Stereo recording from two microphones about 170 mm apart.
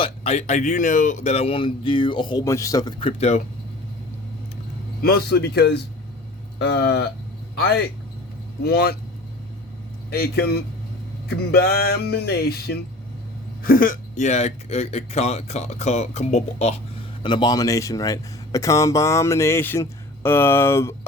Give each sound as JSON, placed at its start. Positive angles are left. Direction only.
{"t": 0.0, "sound": "speech", "side_deg": 40}
{"t": 3.0, "sound": "speech", "side_deg": 40}
{"t": 5.0, "sound": "speech", "side_deg": 70}
{"t": 8.6, "sound": "speech", "side_deg": 65}
{"t": 10.1, "sound": "speech", "side_deg": 65}
{"t": 13.6, "sound": "speech", "side_deg": 55}
{"t": 17.2, "sound": "speech", "side_deg": 25}